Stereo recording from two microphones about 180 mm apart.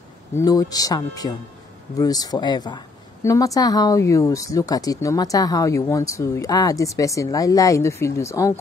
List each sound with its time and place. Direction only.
0.4 s speech: 20° left (ahead or behind)